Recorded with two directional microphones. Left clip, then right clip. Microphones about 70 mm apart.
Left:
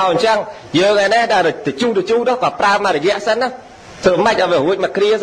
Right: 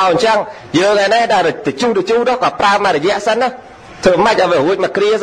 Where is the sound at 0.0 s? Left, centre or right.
Right.